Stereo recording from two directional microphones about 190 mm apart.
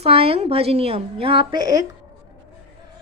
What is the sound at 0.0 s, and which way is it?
Speech, 30° right (ahead or behind).